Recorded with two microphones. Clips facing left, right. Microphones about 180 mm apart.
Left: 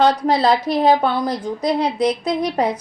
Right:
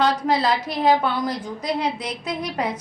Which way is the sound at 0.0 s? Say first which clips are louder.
Left 4 dB; 35° left (ahead or behind).